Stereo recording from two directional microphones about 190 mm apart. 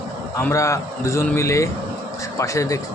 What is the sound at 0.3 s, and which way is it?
Speech, 15° left (ahead or behind).